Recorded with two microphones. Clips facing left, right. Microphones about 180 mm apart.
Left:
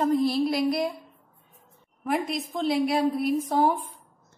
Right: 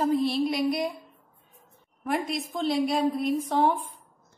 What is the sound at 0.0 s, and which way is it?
Speech, centre (ahead or behind).